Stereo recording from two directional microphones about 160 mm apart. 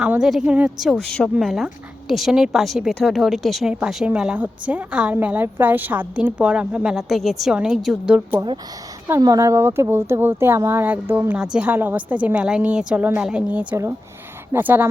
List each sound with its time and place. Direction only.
0.0 s a woman's voice: 5° right (ahead or behind)
9.0 s speech: 20° right (ahead or behind)